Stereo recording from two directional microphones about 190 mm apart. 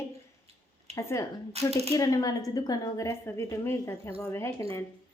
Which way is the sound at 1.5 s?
35° right (ahead or behind).